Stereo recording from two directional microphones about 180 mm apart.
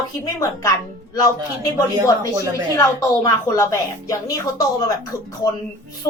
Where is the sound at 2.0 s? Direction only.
20° right (ahead or behind).